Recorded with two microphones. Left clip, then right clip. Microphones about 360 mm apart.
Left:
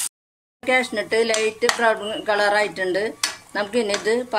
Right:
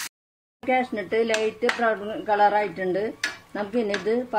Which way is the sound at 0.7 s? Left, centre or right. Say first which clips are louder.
Left 4 dB; left.